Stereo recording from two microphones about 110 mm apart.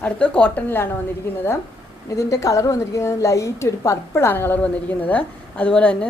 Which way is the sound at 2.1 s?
30° left (ahead or behind).